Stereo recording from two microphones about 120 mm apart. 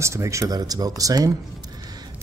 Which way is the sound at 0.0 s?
25° right (ahead or behind).